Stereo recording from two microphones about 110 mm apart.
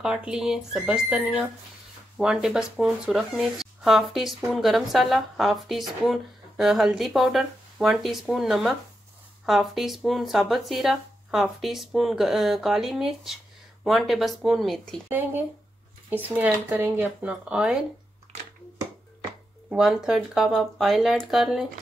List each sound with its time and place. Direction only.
0.0 s speech: 5° right (ahead or behind)
15.0 s speech: 20° right (ahead or behind)
17.3 s speech: 5° right (ahead or behind)
19.7 s speech: 5° right (ahead or behind)